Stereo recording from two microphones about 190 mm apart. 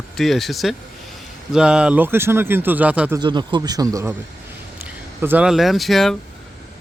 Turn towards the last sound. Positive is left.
turn(degrees=0)  # may be behind; listen again after turning